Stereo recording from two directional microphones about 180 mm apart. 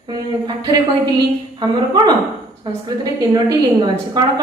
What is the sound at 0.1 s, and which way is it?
A woman's voice, 25° right (ahead or behind).